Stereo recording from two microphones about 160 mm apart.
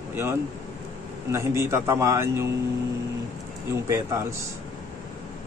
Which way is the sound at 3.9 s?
20° right (ahead or behind).